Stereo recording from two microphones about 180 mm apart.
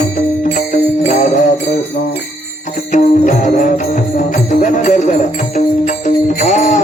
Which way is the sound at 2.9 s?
45° left (ahead or behind).